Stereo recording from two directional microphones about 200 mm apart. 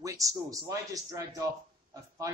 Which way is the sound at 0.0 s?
15° right (ahead or behind).